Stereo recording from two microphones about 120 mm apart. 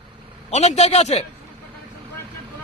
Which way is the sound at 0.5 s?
70° left (ahead or behind).